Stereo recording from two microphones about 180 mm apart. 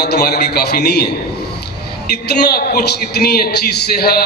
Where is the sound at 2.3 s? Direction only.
60° left (ahead or behind).